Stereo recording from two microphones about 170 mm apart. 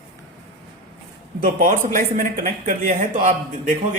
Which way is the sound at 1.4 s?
55° right (ahead or behind).